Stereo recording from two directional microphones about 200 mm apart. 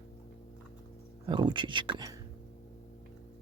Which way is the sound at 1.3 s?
25° right (ahead or behind).